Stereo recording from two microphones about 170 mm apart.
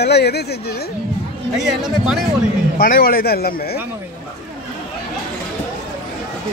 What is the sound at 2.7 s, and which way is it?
A man's voice, 55° left (ahead or behind).